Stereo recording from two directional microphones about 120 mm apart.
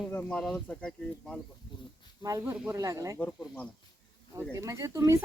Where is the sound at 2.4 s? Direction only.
15° right (ahead or behind).